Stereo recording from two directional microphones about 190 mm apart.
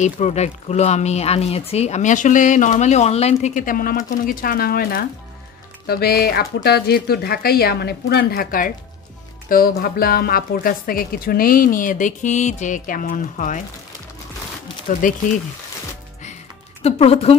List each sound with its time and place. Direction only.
0.0 s a woman's voice: 35° left (ahead or behind)
14.9 s a woman's voice: 45° left (ahead or behind)
16.8 s speech: 35° left (ahead or behind)